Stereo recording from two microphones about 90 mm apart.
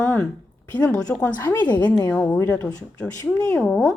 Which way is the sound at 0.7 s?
15° left (ahead or behind).